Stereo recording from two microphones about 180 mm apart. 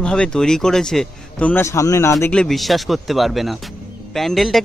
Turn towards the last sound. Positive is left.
turn(degrees=0)  # may be behind; listen again after turning